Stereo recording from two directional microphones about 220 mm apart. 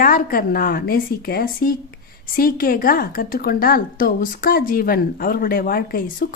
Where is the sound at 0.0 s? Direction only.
40° left (ahead or behind).